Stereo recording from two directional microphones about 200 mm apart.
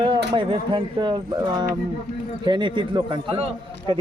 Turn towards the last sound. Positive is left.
turn(degrees=-20)  # may be behind; listen again after turning